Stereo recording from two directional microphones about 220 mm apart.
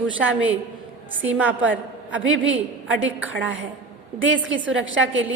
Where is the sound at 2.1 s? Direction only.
60° right (ahead or behind).